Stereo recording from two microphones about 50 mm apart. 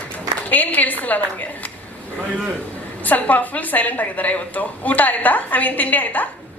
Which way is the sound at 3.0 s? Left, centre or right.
Left.